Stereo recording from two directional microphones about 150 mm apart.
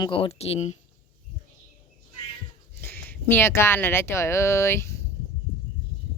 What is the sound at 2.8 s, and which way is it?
Speech, 15° left (ahead or behind).